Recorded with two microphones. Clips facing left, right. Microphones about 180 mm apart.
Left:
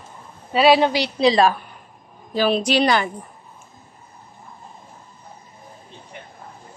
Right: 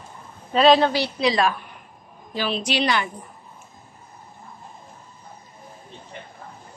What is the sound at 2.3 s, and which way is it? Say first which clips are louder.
Speech: left 6 dB; 45° left (ahead or behind).